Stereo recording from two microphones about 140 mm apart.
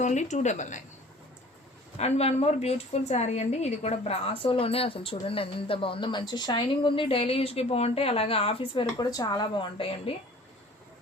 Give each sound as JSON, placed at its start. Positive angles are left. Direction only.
{"t": 0.0, "sound": "speech", "side_deg": 55}
{"t": 2.0, "sound": "a woman's voice", "side_deg": 50}